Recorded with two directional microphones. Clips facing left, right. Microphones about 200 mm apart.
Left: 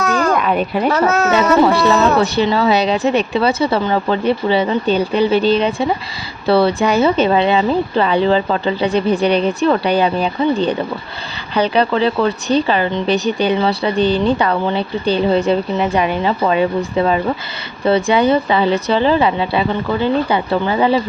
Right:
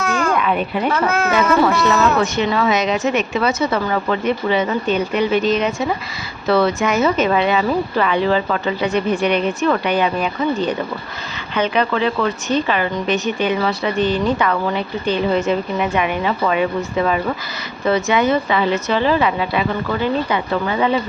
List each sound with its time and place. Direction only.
0.0 s speech: 40° left (ahead or behind)